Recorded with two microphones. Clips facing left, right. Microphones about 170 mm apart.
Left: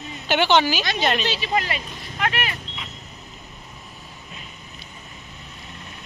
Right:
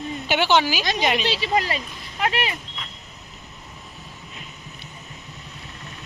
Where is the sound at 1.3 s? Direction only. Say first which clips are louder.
Right 2 dB; 35° right (ahead or behind).